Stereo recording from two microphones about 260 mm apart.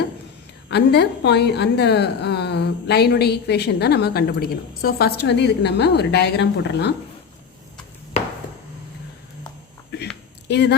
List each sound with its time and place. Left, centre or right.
0.7 s a woman's voice: left
10.5 s a woman's voice: left